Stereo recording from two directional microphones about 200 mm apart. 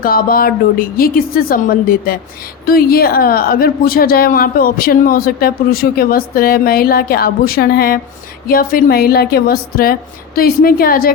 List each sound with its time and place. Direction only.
0.0 s speech: 45° left (ahead or behind)